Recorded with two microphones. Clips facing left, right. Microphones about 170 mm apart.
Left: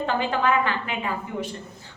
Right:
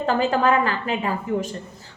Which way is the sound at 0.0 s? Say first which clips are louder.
Right 4 dB; 40° right (ahead or behind).